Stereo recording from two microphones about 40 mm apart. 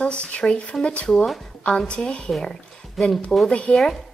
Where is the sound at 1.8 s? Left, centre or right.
Left.